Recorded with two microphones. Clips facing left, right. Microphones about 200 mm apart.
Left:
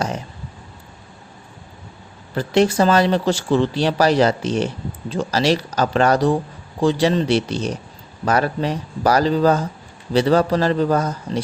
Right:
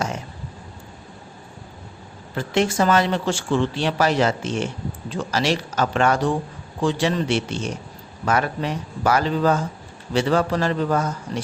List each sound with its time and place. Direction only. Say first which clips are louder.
2.3 s speech: left 5 dB; 35° left (ahead or behind)